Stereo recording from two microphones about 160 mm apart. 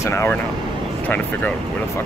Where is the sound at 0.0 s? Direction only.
15° left (ahead or behind).